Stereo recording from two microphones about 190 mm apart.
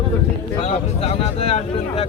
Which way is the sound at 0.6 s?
35° left (ahead or behind).